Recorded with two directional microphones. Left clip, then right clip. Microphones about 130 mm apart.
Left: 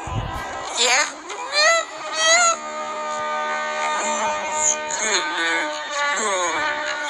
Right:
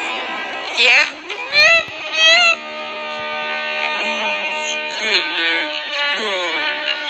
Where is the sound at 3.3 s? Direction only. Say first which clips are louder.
Right 4 dB; 20° right (ahead or behind).